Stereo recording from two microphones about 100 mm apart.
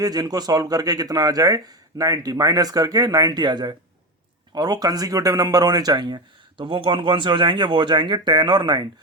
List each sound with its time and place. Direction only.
0.0 s speech: 40° right (ahead or behind)